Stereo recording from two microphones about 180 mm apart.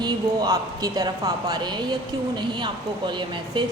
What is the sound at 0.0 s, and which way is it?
A woman's voice, 20° right (ahead or behind).